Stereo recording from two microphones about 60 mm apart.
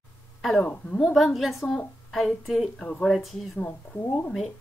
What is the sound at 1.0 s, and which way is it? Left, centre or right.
A woman's voice, centre.